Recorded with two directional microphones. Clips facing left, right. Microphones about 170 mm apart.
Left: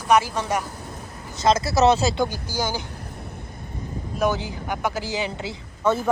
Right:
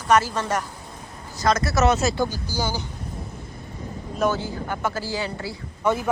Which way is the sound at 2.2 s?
15° left (ahead or behind).